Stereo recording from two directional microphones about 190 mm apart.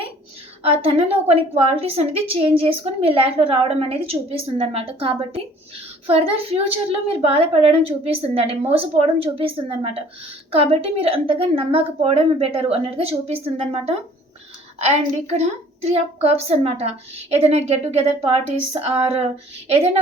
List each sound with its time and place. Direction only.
0.6 s a woman's voice: 30° right (ahead or behind)